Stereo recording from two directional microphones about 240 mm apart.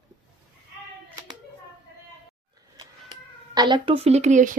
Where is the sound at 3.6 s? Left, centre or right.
Centre.